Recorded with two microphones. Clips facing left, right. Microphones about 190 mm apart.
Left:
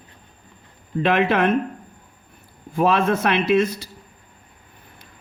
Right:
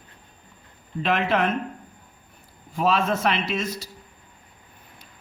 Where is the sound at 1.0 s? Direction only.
60° left (ahead or behind).